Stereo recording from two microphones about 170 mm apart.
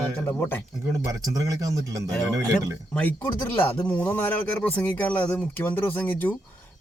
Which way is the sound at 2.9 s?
10° left (ahead or behind).